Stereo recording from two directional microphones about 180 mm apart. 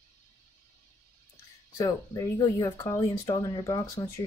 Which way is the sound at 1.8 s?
20° left (ahead or behind).